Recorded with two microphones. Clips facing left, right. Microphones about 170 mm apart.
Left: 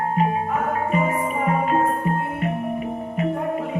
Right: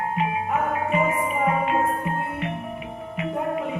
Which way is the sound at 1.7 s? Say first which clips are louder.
Left 3 dB; 40° left (ahead or behind).